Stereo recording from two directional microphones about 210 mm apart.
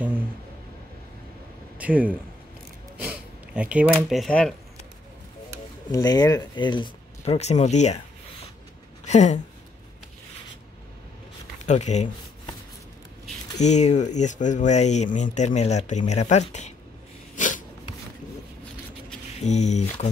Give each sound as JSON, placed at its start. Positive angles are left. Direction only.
{"t": 1.8, "sound": "a man's voice", "side_deg": -5}
{"t": 5.9, "sound": "speech", "side_deg": 15}
{"t": 11.6, "sound": "speech", "side_deg": 35}
{"t": 13.6, "sound": "speech", "side_deg": 35}
{"t": 17.4, "sound": "a sound", "side_deg": 40}
{"t": 19.4, "sound": "speech", "side_deg": 35}